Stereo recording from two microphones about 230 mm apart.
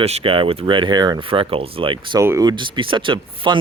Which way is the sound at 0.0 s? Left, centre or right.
Right.